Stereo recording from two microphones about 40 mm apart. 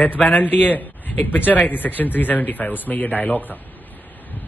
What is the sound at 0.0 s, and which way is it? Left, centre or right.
A man's voice, left.